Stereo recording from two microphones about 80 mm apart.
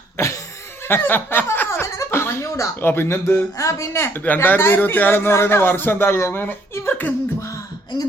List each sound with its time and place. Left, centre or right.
0.2 s cough: left
0.9 s speech: left
3.6 s a man's voice: left
6.7 s beatboxing: left